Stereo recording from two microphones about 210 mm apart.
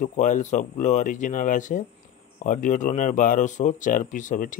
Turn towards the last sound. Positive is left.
turn(degrees=40)  # may be behind; listen again after turning